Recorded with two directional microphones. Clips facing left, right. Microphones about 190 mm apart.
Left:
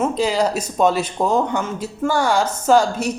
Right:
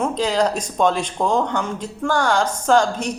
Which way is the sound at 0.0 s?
10° left (ahead or behind).